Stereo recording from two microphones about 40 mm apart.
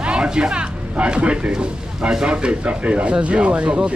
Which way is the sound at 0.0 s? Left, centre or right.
Right.